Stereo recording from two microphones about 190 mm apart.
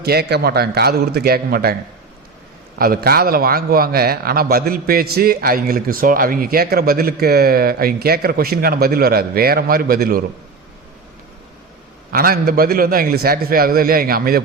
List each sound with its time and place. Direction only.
0.0 s a man's voice: 55° right (ahead or behind)
2.7 s a man's voice: 50° right (ahead or behind)
12.1 s a man's voice: 50° right (ahead or behind)